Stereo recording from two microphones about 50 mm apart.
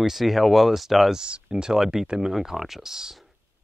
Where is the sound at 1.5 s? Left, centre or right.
Centre.